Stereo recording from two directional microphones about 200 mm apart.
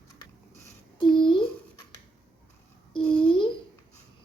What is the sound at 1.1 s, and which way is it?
Speech, 25° left (ahead or behind).